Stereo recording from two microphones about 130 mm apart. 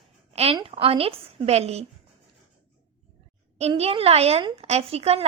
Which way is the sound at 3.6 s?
55° right (ahead or behind).